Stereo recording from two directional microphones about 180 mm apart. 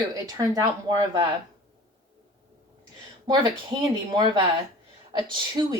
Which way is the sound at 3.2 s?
25° right (ahead or behind).